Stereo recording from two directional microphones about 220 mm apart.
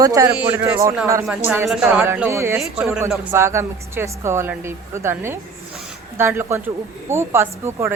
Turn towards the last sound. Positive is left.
turn(degrees=-10)  # may be behind; listen again after turning